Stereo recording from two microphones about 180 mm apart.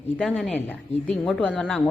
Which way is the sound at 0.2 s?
5° left (ahead or behind).